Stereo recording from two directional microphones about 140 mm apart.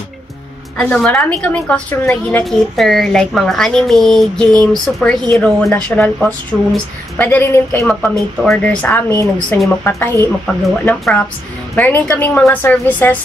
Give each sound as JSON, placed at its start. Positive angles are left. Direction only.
{"t": 0.7, "sound": "a woman's voice", "side_deg": 5}
{"t": 7.8, "sound": "a woman's voice", "side_deg": 5}
{"t": 11.7, "sound": "a woman's voice", "side_deg": 15}